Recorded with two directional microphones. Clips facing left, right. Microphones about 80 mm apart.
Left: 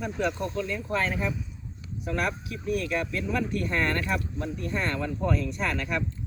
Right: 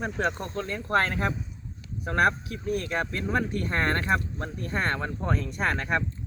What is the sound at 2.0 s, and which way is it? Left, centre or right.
Speech, right.